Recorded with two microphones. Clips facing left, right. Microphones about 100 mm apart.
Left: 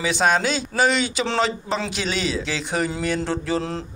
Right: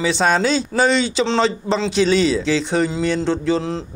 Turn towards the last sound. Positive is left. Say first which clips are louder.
# right 5 dB
turn(degrees=-25)  # may be behind; listen again after turning